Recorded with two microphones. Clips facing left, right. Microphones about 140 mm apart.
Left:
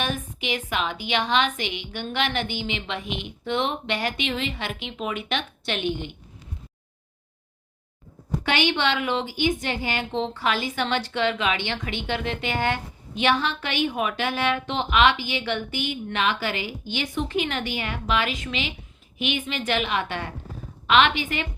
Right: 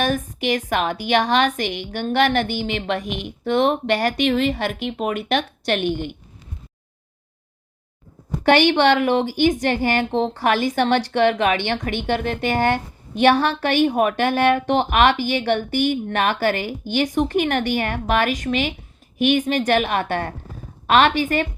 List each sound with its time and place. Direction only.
0.0 s a woman's voice: 45° right (ahead or behind)
8.4 s a woman's voice: 50° right (ahead or behind)